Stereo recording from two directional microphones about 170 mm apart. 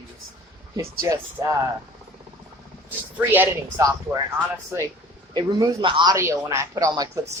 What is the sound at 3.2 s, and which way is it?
Speech, 10° right (ahead or behind).